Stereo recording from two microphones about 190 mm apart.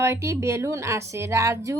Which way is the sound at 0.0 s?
15° right (ahead or behind).